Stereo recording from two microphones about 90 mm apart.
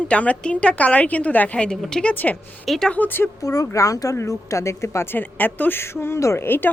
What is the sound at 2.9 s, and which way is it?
Speech, 20° left (ahead or behind).